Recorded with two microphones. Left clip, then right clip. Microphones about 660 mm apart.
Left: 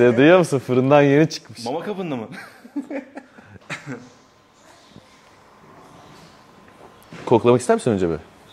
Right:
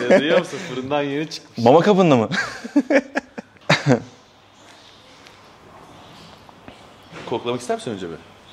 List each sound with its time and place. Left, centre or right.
0.0 s speech: left
1.7 s speech: right
3.6 s cough: right
7.2 s speech: left